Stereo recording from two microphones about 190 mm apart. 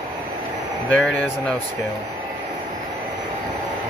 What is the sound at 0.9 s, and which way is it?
Speech, 5° left (ahead or behind).